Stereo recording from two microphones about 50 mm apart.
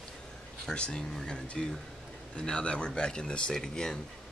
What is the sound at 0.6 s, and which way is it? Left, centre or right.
Speech, centre.